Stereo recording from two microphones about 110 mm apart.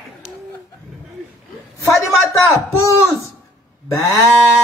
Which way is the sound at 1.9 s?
25° left (ahead or behind).